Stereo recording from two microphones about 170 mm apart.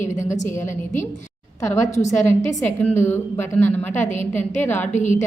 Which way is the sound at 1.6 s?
20° left (ahead or behind).